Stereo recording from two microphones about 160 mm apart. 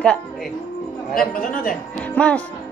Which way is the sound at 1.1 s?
60° left (ahead or behind).